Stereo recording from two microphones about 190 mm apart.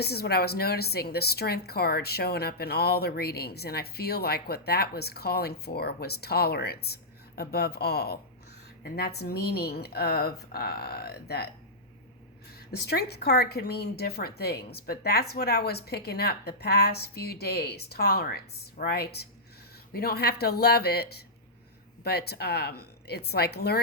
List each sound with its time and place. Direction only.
0.0 s a woman's voice: 55° left (ahead or behind)
12.7 s a woman's voice: 55° left (ahead or behind)